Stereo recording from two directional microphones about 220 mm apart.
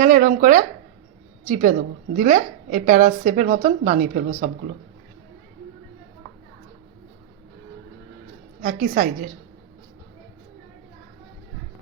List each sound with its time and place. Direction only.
0.0 s a woman's voice: 35° right (ahead or behind)
8.6 s a woman's voice: 40° right (ahead or behind)